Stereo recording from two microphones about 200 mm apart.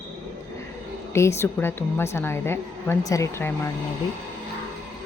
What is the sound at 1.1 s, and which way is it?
A woman's voice, 15° left (ahead or behind).